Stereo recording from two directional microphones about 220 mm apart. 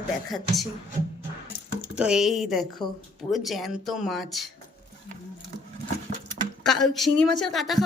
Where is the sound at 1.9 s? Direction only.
5° right (ahead or behind).